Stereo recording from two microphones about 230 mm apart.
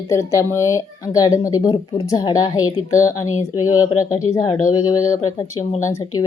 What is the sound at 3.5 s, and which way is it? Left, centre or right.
Speech, left.